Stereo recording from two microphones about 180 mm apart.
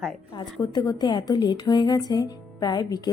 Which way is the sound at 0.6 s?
25° left (ahead or behind).